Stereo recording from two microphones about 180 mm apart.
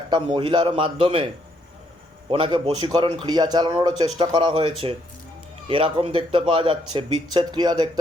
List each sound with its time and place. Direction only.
0.1 s speech: 25° right (ahead or behind)
2.3 s speech: 25° right (ahead or behind)